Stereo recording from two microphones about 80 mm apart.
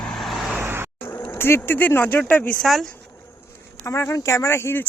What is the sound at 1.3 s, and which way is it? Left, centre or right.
Speech, left.